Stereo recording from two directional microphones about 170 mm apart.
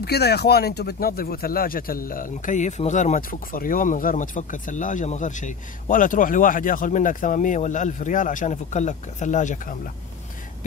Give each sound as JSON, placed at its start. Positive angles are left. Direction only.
{"t": 0.0, "sound": "speech", "side_deg": 70}